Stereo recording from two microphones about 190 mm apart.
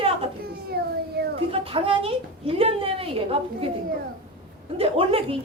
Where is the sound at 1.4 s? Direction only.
30° right (ahead or behind).